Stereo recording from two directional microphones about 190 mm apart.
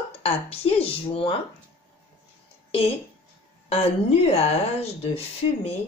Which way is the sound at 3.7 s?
30° left (ahead or behind).